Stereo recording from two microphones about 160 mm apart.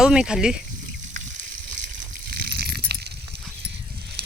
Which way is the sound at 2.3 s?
80° right.